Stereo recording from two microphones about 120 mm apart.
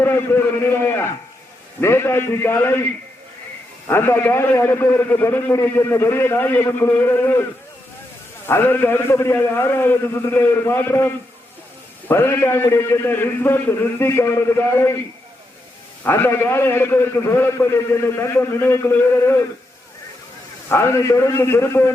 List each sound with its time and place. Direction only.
0.0 s a man's voice: 20° left (ahead or behind)
3.8 s a man's voice: 20° left (ahead or behind)
8.4 s a man's voice: 20° left (ahead or behind)
16.0 s a man's voice: 20° left (ahead or behind)
20.7 s a man's voice: 20° left (ahead or behind)